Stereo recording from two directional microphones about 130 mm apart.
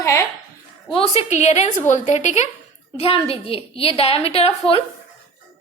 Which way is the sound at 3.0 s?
45° left (ahead or behind).